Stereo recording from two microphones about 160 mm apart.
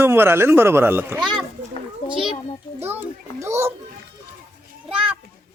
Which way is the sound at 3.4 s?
15° right (ahead or behind).